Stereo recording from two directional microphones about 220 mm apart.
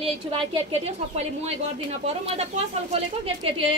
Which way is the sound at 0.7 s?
30° right (ahead or behind).